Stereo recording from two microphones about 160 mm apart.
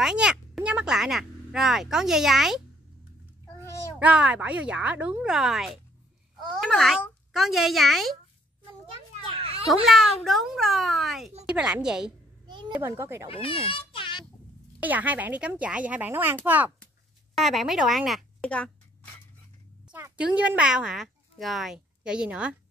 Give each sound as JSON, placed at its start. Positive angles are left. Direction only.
{"t": 0.0, "sound": "speech", "side_deg": -5}
{"t": 4.0, "sound": "a child's voice", "side_deg": -5}
{"t": 9.4, "sound": "a sound", "side_deg": -35}
{"t": 9.7, "sound": "a child's voice", "side_deg": 0}
{"t": 12.4, "sound": "a sound", "side_deg": -30}
{"t": 12.7, "sound": "speech", "side_deg": -15}
{"t": 13.3, "sound": "a sound", "side_deg": 35}
{"t": 14.8, "sound": "a child's voice", "side_deg": -10}
{"t": 19.9, "sound": "speech", "side_deg": -10}